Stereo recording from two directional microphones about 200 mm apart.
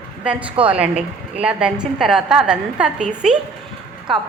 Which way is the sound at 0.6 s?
5° right (ahead or behind).